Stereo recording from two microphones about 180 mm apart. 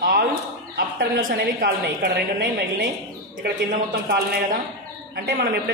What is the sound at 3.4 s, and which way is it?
A man's voice, 50° right (ahead or behind).